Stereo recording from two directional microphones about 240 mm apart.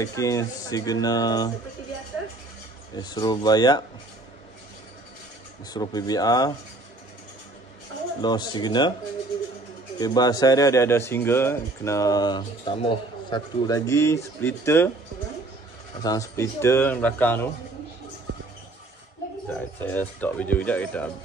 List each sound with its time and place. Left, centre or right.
0.0 s speech: centre
3.0 s speech: centre
5.7 s speech: centre
8.2 s speech: centre
9.9 s speech: centre
16.0 s speech: centre
19.4 s speech: centre